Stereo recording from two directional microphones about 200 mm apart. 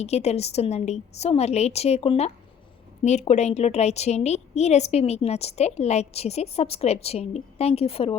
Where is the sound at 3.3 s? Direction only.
35° left (ahead or behind).